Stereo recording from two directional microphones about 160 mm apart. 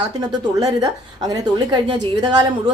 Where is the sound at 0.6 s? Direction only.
25° right (ahead or behind).